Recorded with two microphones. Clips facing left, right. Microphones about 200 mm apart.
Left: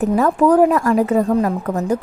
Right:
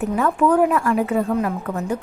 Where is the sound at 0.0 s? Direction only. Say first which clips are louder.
Left 4 dB; 40° left (ahead or behind).